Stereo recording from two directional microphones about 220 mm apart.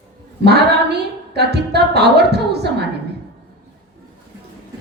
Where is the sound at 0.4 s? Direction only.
50° right (ahead or behind).